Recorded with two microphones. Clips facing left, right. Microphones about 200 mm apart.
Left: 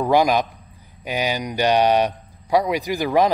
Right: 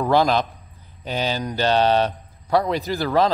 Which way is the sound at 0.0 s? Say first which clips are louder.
Left 1 dB; 15° left (ahead or behind).